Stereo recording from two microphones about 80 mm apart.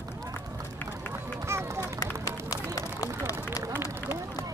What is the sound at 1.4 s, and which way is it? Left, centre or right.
Run, right.